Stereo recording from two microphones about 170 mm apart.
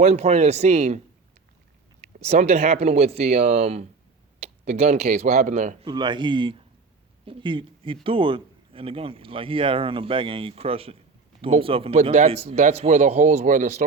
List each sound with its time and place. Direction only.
0.0 s speech: 40° right (ahead or behind)
2.1 s speech: 40° right (ahead or behind)
5.8 s speech: 30° right (ahead or behind); by 13.8 s 45° right (ahead or behind)